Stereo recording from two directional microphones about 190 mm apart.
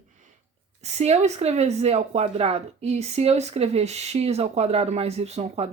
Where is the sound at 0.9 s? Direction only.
35° right (ahead or behind).